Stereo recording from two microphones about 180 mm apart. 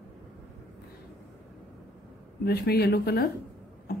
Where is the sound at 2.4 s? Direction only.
60° left (ahead or behind).